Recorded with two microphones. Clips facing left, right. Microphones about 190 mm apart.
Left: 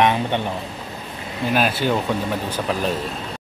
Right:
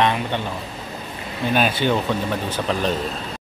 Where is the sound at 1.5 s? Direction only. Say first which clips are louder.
Even; 5° left (ahead or behind).